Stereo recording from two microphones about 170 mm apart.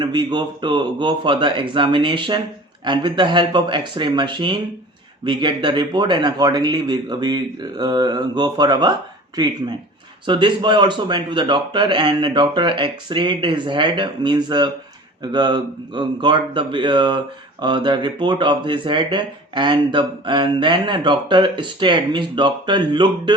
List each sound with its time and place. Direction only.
0.0 s speech: 25° right (ahead or behind)